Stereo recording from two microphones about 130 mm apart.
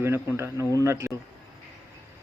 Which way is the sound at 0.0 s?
20° right (ahead or behind).